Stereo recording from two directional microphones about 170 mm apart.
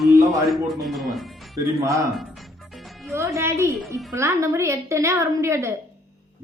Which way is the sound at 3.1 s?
15° right (ahead or behind).